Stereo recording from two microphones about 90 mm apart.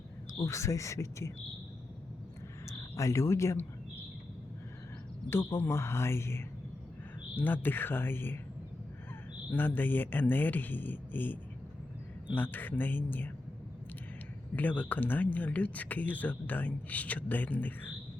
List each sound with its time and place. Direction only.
0.4 s speech: 35° left (ahead or behind)
2.6 s speech: 35° left (ahead or behind)
5.3 s speech: 25° left (ahead or behind)
9.6 s speech: 20° left (ahead or behind)
14.5 s speech: 15° left (ahead or behind)